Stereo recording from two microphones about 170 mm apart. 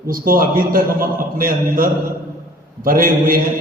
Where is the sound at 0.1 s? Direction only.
55° right (ahead or behind).